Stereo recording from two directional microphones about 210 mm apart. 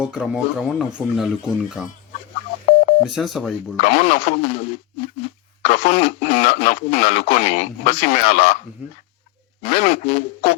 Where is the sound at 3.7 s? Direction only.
30° left (ahead or behind).